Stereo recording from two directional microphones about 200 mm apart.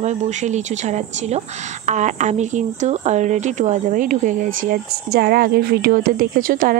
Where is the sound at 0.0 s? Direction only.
35° right (ahead or behind).